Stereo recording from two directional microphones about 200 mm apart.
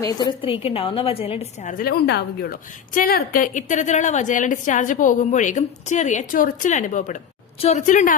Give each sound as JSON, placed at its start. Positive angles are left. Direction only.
{"t": 0.0, "sound": "a woman's voice", "side_deg": 20}
{"t": 1.7, "sound": "a woman's voice", "side_deg": 50}